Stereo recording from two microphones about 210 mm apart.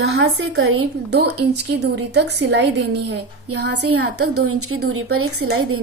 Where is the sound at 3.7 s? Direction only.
90° right.